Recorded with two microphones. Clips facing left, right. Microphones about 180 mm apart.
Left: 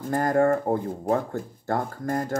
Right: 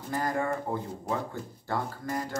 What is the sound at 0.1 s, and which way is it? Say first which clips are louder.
Speech: left 9 dB; 50° left (ahead or behind).